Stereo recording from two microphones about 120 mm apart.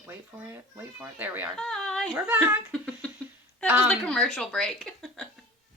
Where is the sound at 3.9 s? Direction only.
5° left (ahead or behind).